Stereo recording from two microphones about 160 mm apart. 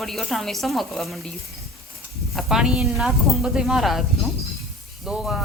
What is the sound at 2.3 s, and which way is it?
Speech, centre (ahead or behind).